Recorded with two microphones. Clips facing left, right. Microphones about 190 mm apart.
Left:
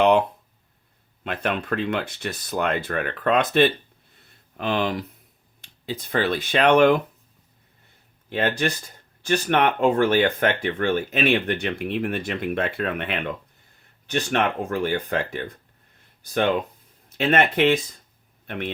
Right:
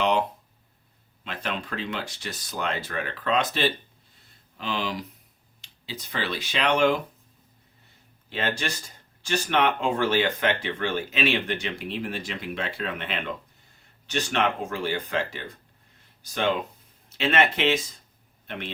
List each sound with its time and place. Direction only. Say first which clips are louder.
0.0 s speech: left 6 dB; 55° left (ahead or behind)
8.3 s speech: left 6 dB; 55° left (ahead or behind)